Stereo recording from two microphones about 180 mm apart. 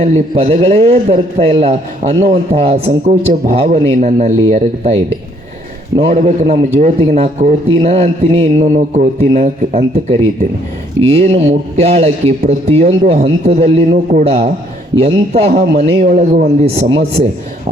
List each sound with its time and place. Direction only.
0.0 s a man's voice: 40° right (ahead or behind)
6.0 s a man's voice: 40° right (ahead or behind)